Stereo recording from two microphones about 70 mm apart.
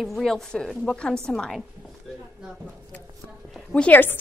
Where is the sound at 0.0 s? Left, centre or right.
Centre.